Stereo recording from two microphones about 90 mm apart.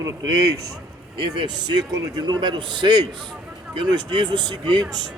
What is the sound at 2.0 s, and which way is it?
Speech, 50° right (ahead or behind).